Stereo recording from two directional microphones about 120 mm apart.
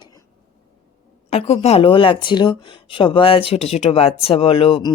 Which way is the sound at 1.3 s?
65° left (ahead or behind).